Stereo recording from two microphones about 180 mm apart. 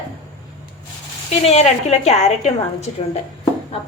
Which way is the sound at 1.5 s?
35° left (ahead or behind).